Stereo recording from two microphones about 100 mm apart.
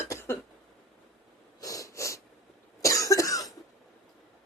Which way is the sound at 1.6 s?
35° left (ahead or behind).